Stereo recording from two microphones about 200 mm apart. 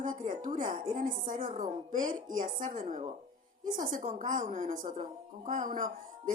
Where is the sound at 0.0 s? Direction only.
40° right (ahead or behind).